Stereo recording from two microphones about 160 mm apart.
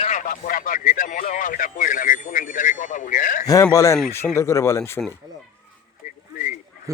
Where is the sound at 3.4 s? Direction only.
20° left (ahead or behind).